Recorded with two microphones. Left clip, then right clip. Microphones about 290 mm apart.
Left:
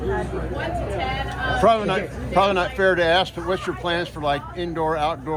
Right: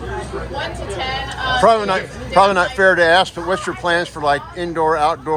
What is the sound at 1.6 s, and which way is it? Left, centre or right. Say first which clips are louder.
A man's voice: right 5 dB; right.